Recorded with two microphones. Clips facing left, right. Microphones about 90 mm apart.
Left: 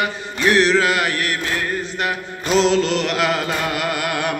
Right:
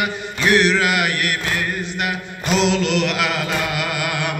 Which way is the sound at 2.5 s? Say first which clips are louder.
Left 2 dB; 40° left (ahead or behind).